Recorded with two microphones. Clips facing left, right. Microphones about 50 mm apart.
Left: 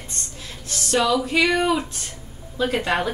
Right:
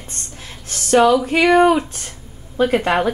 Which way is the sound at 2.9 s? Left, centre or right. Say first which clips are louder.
Right 5 dB; right.